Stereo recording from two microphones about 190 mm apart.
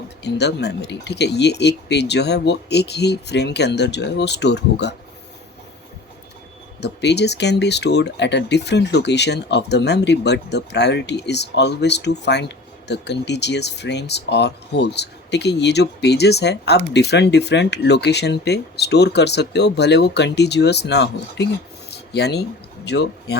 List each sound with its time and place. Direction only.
0.2 s speech: 60° left (ahead or behind)
6.8 s speech: 65° left (ahead or behind)
21.8 s a sound: 60° left (ahead or behind)
22.9 s speech: 60° left (ahead or behind)